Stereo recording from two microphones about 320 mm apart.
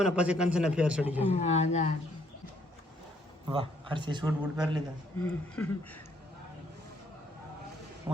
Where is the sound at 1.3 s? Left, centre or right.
Left.